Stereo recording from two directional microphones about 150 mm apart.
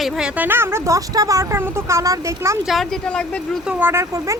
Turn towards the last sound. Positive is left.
turn(degrees=-20)  # may be behind; listen again after turning